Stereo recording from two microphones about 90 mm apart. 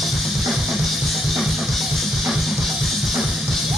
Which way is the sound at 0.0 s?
Centre (ahead or behind).